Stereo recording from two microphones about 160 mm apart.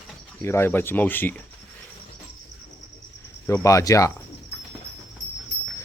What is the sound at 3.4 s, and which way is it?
Speech, 15° left (ahead or behind).